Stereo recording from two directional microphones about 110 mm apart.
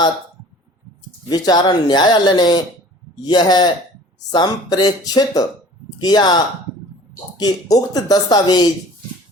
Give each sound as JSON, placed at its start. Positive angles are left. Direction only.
{"t": 1.3, "sound": "speech", "side_deg": 40}